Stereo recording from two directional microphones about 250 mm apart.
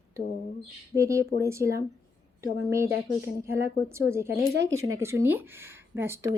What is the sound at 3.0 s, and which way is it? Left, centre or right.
Speech, centre.